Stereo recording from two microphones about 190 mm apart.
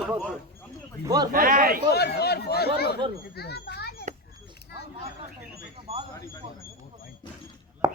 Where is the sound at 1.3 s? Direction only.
45° right (ahead or behind).